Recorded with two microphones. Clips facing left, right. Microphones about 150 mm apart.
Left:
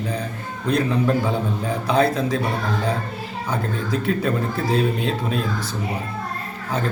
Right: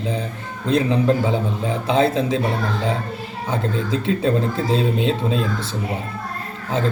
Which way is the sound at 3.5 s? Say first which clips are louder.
Right 2 dB; 25° right (ahead or behind).